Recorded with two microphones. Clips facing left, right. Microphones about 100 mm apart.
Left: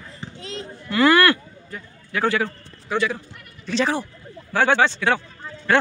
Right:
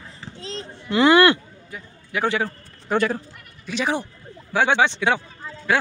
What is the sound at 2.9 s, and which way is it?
Speech, 45° right (ahead or behind).